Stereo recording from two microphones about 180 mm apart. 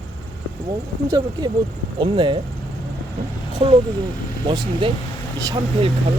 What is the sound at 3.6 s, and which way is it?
Speech, 30° right (ahead or behind).